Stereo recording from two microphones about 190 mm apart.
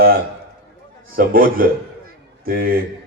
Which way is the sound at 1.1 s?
50° right (ahead or behind).